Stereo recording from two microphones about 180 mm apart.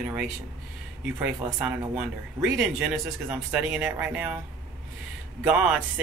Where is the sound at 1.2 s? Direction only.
5° right (ahead or behind).